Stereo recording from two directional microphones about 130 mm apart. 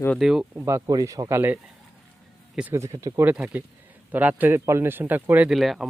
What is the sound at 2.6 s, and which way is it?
Speech, 15° right (ahead or behind).